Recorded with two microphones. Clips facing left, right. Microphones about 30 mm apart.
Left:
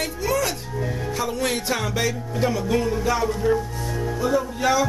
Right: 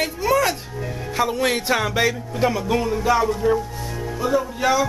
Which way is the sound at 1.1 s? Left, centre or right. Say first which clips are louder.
Right 6 dB; right.